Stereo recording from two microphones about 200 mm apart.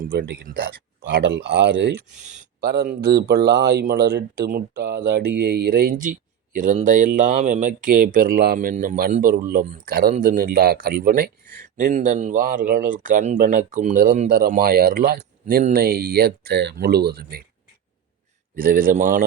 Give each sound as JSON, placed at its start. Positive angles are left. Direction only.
{"t": 0.0, "sound": "speech", "side_deg": -50}
{"t": 18.5, "sound": "speech", "side_deg": -45}